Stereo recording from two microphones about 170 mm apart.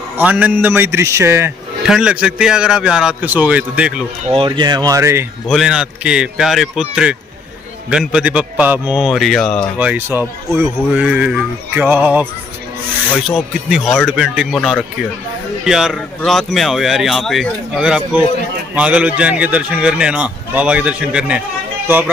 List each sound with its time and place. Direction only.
0.2 s speech: 10° right (ahead or behind)
1.8 s a man's voice: 5° right (ahead or behind)
4.3 s speech: 30° right (ahead or behind)
5.5 s a man's voice: 5° right (ahead or behind)
9.8 s speech: 10° right (ahead or behind)
11.1 s speech: 5° right (ahead or behind)
13.3 s a man's voice: 5° right (ahead or behind)